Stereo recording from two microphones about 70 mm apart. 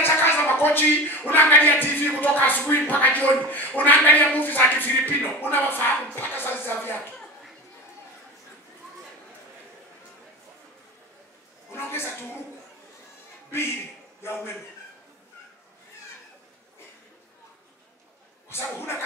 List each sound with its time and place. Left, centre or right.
0.0 s speech: left
11.7 s a sound: left
18.5 s speech: left